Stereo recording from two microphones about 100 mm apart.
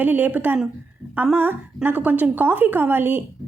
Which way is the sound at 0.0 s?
20° right (ahead or behind).